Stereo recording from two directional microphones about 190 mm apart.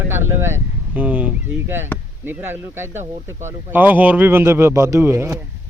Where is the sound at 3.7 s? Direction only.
10° right (ahead or behind).